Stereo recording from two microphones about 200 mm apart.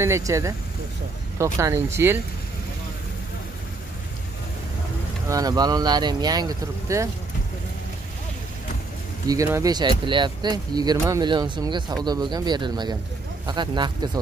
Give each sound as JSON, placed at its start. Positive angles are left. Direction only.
{"t": 0.0, "sound": "speech", "side_deg": -15}
{"t": 5.3, "sound": "speech", "side_deg": -20}
{"t": 9.3, "sound": "speech", "side_deg": -15}